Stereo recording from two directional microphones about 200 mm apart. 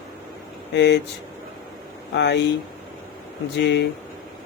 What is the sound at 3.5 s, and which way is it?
Speech, 60° left (ahead or behind).